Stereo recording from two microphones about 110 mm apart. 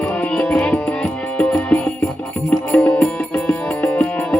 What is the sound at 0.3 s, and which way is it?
Music, 10° left (ahead or behind).